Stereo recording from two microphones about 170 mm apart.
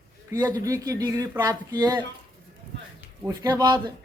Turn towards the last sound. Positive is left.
turn(degrees=-20)  # may be behind; listen again after turning